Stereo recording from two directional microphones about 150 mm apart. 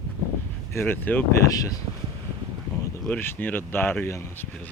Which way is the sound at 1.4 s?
25° left (ahead or behind).